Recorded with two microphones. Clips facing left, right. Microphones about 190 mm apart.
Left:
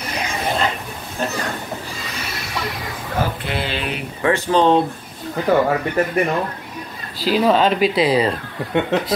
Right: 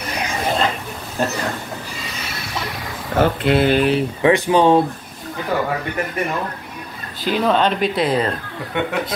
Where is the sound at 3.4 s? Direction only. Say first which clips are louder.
Right 10 dB; 55° right (ahead or behind).